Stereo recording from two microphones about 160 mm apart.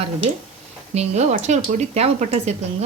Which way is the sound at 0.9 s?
45° right (ahead or behind).